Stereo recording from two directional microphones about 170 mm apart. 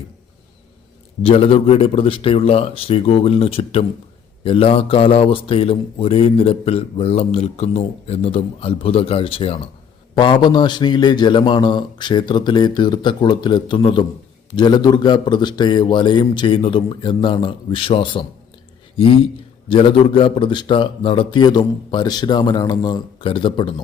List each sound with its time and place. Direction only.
1.2 s a man's voice: 35° left (ahead or behind)